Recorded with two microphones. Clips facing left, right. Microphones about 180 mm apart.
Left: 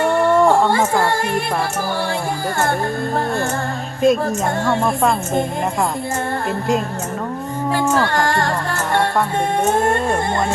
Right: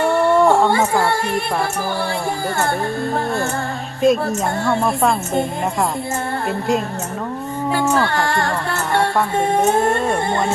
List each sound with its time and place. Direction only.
0.3 s a sound: centre (ahead or behind)
4.0 s speech: centre (ahead or behind)
8.1 s music: 45° left (ahead or behind)